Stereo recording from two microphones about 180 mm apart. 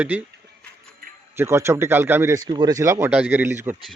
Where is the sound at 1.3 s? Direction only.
15° right (ahead or behind).